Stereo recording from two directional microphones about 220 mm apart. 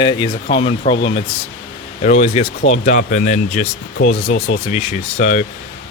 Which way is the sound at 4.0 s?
50° left (ahead or behind).